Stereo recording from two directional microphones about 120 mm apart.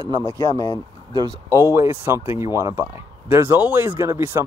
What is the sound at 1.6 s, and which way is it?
Speech, 20° right (ahead or behind).